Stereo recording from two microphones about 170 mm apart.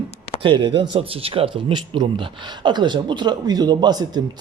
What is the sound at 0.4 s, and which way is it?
A man's voice, 30° right (ahead or behind).